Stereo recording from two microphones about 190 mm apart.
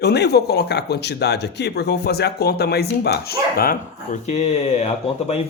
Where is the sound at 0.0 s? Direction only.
60° left (ahead or behind).